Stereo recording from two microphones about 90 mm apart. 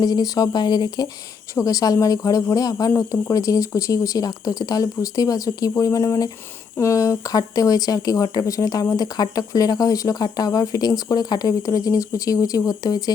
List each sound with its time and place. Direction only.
0.0 s speech: 45° left (ahead or behind)